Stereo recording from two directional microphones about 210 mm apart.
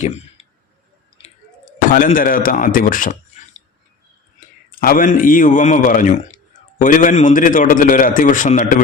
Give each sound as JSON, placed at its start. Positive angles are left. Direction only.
{"t": 1.9, "sound": "a man's voice", "side_deg": 40}